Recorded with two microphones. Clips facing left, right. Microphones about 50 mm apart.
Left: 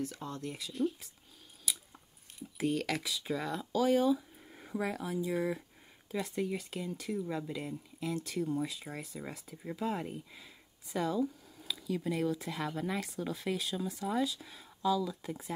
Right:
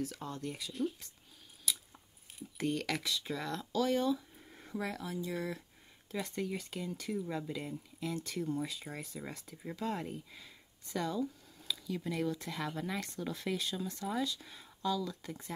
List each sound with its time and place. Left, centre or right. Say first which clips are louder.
0.0 s speech: left 1 dB; centre
1.7 s scissors: even; centre
2.3 s speech: left 2 dB; centre
6.1 s speech: left 3 dB; centre